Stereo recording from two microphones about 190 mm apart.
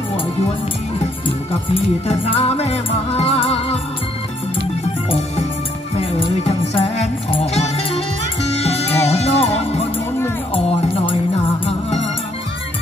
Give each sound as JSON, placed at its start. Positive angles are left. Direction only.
{"t": 1.2, "sound": "music", "side_deg": 30}
{"t": 5.9, "sound": "music", "side_deg": 30}
{"t": 11.6, "sound": "music", "side_deg": 30}